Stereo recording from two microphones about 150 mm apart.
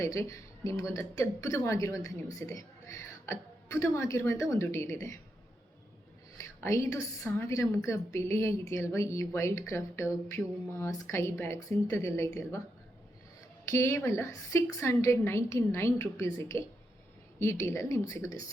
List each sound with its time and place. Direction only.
0.0 s a woman's voice: 20° left (ahead or behind)
6.4 s a woman's voice: 20° left (ahead or behind)
13.7 s a woman's voice: 20° left (ahead or behind)